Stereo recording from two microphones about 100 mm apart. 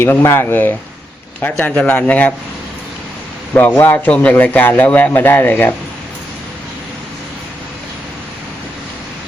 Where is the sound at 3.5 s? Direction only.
20° left (ahead or behind).